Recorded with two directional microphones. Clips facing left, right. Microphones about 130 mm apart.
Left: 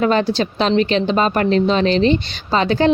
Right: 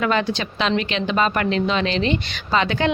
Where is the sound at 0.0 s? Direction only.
35° left (ahead or behind).